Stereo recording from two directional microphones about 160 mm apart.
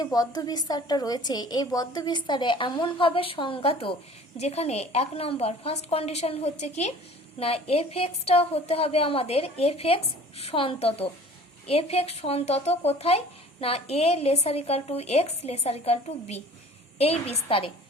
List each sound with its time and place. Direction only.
0.0 s a woman's voice: 25° left (ahead or behind)